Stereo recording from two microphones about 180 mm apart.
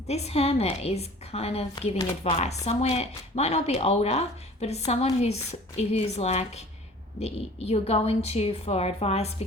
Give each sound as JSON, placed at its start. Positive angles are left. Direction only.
{"t": 0.1, "sound": "speech", "side_deg": 35}